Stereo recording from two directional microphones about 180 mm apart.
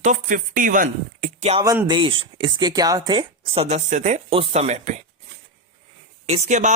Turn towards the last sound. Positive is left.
turn(degrees=-40)  # may be behind; listen again after turning